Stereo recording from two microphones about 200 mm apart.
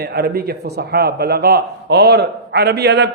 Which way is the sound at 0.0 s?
50° right (ahead or behind).